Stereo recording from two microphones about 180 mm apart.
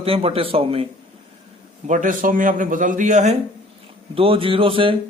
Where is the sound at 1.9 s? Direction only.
45° right (ahead or behind).